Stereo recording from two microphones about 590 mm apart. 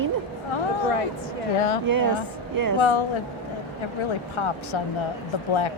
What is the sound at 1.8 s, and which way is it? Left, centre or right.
Speech, right.